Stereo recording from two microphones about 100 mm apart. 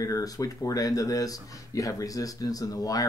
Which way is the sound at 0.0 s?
35° left (ahead or behind).